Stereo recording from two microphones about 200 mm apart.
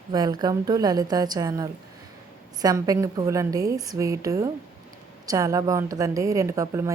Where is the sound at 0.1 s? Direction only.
20° right (ahead or behind).